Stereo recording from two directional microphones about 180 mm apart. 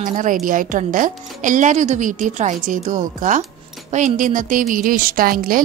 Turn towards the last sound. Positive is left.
turn(degrees=-50)  # may be behind; listen again after turning